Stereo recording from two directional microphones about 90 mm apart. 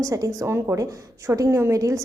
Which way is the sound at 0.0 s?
40° right (ahead or behind).